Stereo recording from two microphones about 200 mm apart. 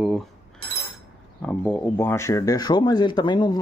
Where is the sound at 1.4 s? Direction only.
5° left (ahead or behind).